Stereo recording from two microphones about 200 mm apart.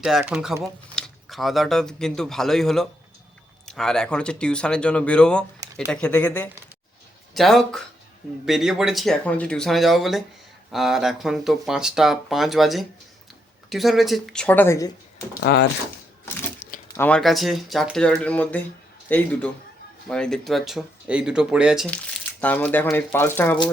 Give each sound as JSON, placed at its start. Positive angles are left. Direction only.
{"t": 0.0, "sound": "speech", "side_deg": 0}
{"t": 15.4, "sound": "speech", "side_deg": 55}
{"t": 16.9, "sound": "a man's voice", "side_deg": 10}
{"t": 21.8, "sound": "speech", "side_deg": 5}